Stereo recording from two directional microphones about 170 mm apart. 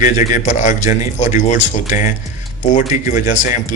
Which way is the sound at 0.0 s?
50° left (ahead or behind).